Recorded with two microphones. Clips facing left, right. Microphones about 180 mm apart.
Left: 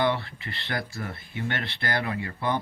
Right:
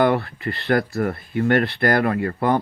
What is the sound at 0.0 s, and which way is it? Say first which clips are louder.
Speech: right 7 dB; 60° right (ahead or behind).